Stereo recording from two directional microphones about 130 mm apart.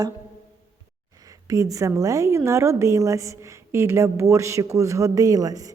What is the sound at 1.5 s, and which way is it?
A woman's voice, 25° right (ahead or behind).